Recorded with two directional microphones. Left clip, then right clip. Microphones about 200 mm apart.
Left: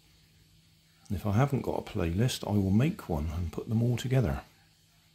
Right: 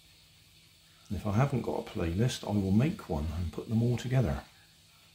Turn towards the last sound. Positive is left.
turn(degrees=40)  # may be behind; listen again after turning